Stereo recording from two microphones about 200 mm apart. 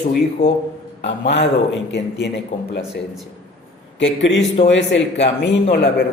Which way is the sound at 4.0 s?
65° left (ahead or behind).